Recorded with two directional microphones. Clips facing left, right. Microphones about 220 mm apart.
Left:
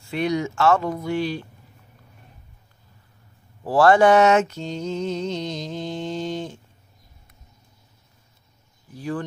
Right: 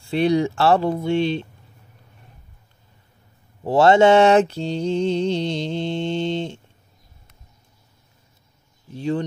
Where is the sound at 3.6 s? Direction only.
25° right (ahead or behind).